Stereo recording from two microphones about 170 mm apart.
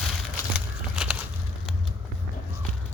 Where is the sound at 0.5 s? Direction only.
5° right (ahead or behind).